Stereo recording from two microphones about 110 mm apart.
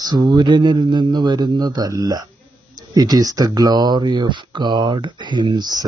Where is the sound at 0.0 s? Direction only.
40° right (ahead or behind).